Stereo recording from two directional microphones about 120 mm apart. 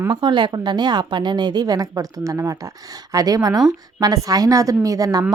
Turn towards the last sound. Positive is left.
turn(degrees=-30)  # may be behind; listen again after turning